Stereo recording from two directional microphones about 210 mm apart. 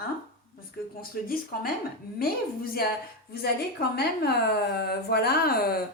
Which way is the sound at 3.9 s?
50° left (ahead or behind).